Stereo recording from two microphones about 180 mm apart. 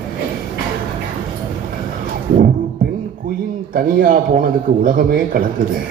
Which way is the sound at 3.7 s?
50° right (ahead or behind).